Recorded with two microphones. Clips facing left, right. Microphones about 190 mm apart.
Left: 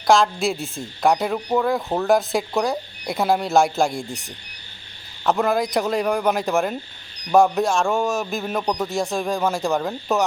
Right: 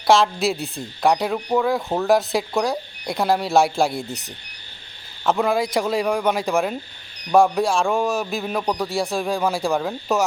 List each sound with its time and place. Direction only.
0.1 s a woman's voice: centre (ahead or behind)